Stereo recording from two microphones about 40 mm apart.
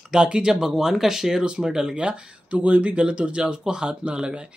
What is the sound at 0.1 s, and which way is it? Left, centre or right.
Speech, right.